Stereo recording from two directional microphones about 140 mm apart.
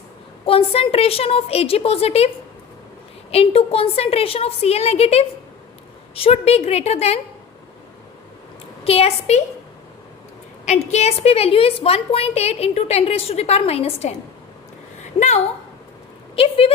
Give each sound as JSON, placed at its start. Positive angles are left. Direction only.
{"t": 0.4, "sound": "a woman's voice", "side_deg": 45}
{"t": 3.3, "sound": "a woman's voice", "side_deg": 45}
{"t": 8.8, "sound": "a woman's voice", "side_deg": 45}
{"t": 10.7, "sound": "a woman's voice", "side_deg": 50}
{"t": 16.3, "sound": "speech", "side_deg": 40}